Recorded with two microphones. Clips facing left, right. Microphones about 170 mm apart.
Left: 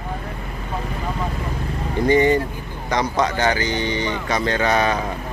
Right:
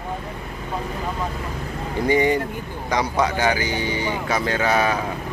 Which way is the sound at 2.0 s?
10° right (ahead or behind).